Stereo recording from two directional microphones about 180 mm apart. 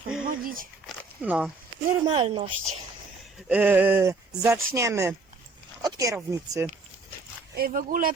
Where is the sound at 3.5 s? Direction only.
10° right (ahead or behind).